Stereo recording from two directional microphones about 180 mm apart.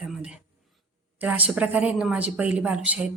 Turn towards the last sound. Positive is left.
turn(degrees=-5)  # may be behind; listen again after turning